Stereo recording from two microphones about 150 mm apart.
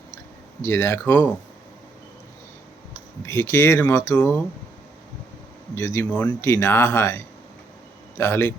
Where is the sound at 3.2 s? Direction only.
20° left (ahead or behind).